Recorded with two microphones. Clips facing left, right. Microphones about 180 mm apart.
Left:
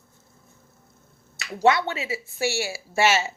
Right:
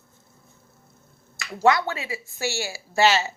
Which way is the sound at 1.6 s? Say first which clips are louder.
Even; 25° left (ahead or behind).